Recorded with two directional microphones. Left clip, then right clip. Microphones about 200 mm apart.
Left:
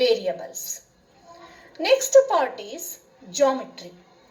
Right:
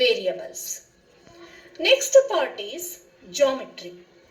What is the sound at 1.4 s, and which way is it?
A woman's voice, 25° left (ahead or behind).